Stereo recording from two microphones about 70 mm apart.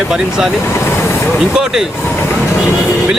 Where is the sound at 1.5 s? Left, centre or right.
Centre.